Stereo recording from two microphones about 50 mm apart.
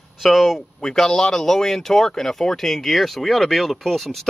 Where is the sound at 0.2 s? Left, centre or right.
Centre.